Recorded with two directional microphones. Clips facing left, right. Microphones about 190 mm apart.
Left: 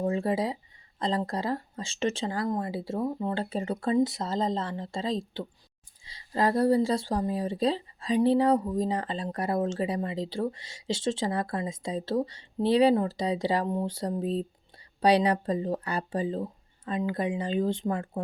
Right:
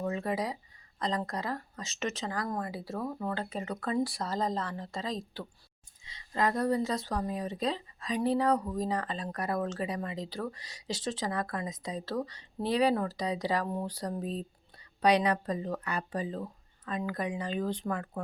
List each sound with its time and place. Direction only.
0.0 s speech: 30° left (ahead or behind)